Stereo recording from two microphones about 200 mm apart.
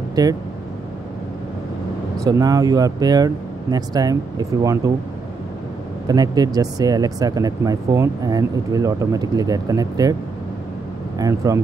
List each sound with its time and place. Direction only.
0.1 s speech: 20° right (ahead or behind)
2.1 s speech: 20° right (ahead or behind)
6.0 s speech: 20° right (ahead or behind)
11.1 s speech: 15° right (ahead or behind)